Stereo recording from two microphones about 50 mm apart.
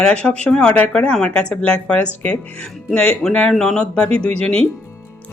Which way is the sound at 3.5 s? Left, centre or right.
Centre.